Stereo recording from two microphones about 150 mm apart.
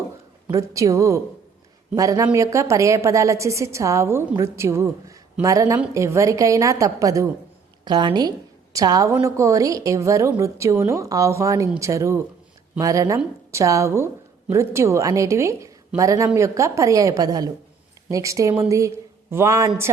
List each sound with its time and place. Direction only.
0.5 s a woman's voice: 20° right (ahead or behind)